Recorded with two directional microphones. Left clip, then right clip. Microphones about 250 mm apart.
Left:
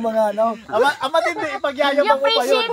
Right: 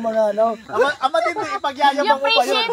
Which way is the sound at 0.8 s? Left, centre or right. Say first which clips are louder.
Even; left.